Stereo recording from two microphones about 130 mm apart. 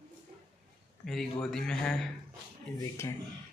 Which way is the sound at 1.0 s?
Centre (ahead or behind).